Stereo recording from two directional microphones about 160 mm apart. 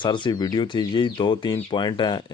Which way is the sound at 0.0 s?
30° left (ahead or behind).